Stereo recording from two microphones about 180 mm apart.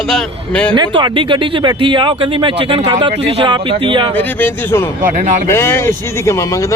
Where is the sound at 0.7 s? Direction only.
25° right (ahead or behind).